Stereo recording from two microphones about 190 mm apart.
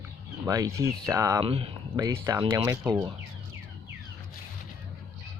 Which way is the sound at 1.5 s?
30° right (ahead or behind).